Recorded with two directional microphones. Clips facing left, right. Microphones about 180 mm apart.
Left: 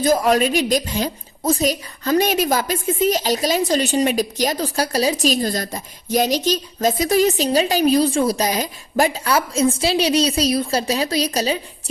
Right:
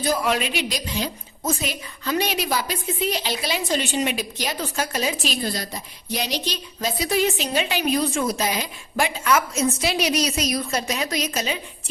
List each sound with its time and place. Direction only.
0.0 s a woman's voice: 45° left (ahead or behind)